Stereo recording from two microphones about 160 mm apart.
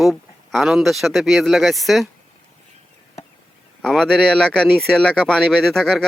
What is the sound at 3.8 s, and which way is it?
Speech, 5° left (ahead or behind).